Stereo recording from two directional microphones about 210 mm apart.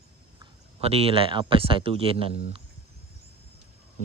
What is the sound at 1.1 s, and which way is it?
Speech, 25° right (ahead or behind).